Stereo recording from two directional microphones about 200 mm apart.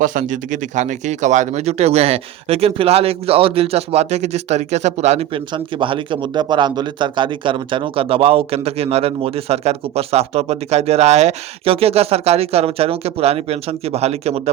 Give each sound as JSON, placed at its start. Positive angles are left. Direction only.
{"t": 0.0, "sound": "speech", "side_deg": -40}